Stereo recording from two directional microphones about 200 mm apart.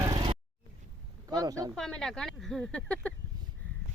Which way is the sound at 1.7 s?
5° left (ahead or behind).